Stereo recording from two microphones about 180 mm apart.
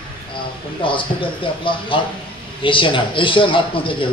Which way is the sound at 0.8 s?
30° left (ahead or behind).